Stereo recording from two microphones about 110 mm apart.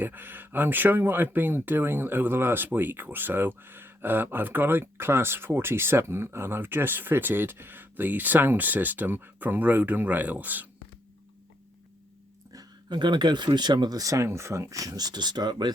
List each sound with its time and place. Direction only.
0.0 s speech: 20° right (ahead or behind)
12.5 s speech: 40° right (ahead or behind)